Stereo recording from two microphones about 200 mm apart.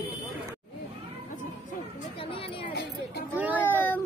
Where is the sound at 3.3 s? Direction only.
10° right (ahead or behind).